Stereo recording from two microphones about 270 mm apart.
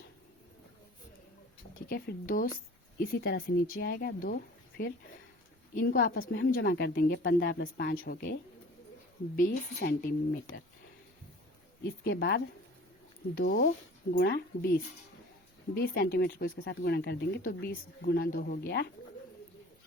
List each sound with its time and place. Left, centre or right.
1.9 s speech: left
12.0 s speech: left
15.7 s speech: left